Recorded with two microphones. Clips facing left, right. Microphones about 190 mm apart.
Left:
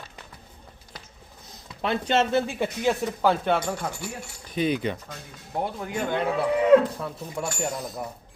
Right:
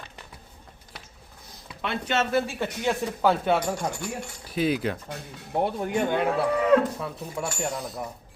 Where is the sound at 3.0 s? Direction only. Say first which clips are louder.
Even; 5° right (ahead or behind).